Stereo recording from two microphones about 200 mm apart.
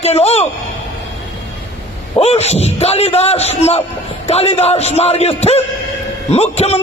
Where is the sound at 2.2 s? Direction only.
30° left (ahead or behind).